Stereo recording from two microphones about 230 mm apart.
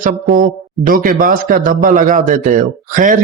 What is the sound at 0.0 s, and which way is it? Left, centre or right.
A man's voice, right.